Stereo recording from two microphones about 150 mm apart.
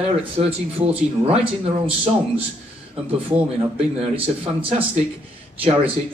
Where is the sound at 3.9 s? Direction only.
40° right (ahead or behind).